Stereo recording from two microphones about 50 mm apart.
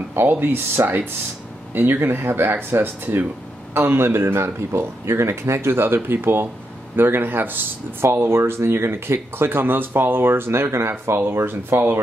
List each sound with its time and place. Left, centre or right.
0.3 s speech: right
5.9 s speech: right
8.1 s speech: right
11.1 s speech: right